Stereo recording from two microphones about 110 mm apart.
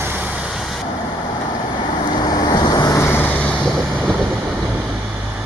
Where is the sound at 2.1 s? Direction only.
35° left (ahead or behind); by 3.8 s 5° left (ahead or behind).